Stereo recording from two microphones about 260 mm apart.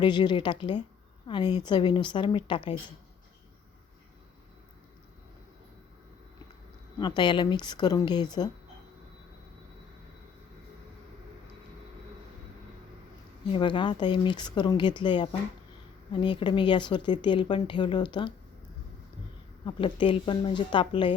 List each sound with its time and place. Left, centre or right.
0.0 s speech: centre
7.0 s speech: centre
13.5 s speech: centre
19.6 s speech: centre